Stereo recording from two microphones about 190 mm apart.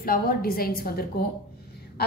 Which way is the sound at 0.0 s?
50° left (ahead or behind).